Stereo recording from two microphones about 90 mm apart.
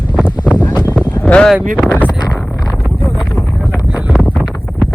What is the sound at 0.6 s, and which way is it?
Wind noise, 50° left (ahead or behind).